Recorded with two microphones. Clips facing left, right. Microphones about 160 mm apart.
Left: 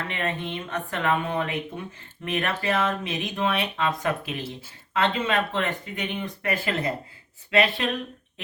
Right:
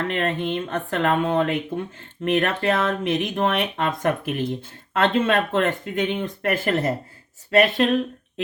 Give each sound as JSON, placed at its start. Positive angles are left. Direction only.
{"t": 0.1, "sound": "speech", "side_deg": -55}